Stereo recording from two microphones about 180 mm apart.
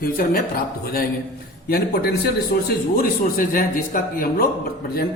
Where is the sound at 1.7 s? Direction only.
60° left (ahead or behind).